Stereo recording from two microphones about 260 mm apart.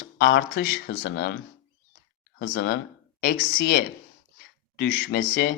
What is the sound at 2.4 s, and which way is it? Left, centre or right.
Speech, left.